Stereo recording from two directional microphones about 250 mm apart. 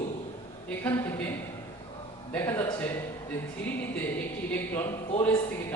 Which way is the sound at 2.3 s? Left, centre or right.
Centre.